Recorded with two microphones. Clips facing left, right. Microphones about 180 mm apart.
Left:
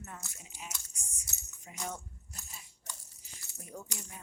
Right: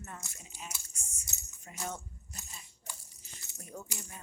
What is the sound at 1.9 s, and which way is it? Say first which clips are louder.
Keys jangling: right 1 dB; 10° left (ahead or behind).